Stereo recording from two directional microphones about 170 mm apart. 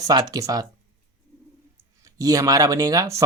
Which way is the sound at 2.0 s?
20° right (ahead or behind).